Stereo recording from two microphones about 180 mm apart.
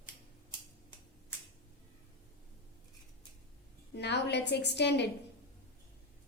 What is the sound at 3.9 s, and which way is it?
A woman's voice, 70° left (ahead or behind).